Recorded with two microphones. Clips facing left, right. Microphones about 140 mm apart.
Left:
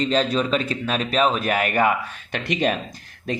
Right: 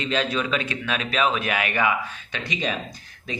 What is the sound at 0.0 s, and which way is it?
Speech, 35° left (ahead or behind).